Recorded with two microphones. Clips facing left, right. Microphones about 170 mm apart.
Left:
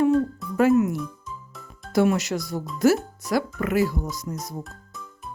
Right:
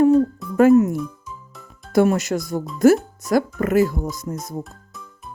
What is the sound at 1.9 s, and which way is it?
Speech, 50° right (ahead or behind).